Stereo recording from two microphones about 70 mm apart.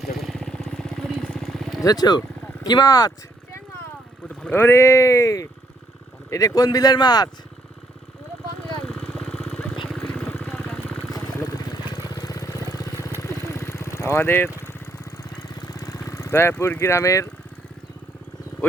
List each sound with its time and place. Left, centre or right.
0.0 s vehicle: centre
1.8 s speech: left
4.4 s boat: left
4.6 s speech: left
8.8 s vehicle: centre
9.5 s vehicle: centre
10.2 s vehicle: left
11.4 s vehicle: left
12.1 s vehicle: left
15.4 s vehicle: left